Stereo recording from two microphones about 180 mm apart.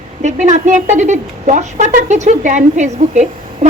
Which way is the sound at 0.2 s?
40° right (ahead or behind).